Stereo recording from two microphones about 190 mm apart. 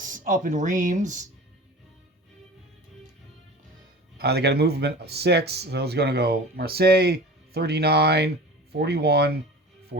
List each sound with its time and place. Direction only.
0.0 s speech: 45° right (ahead or behind)
4.2 s speech: 60° right (ahead or behind)